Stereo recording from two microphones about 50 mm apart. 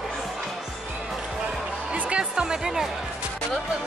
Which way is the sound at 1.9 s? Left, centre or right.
Right.